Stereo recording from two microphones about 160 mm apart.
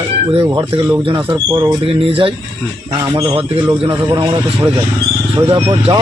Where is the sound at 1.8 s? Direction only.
35° right (ahead or behind).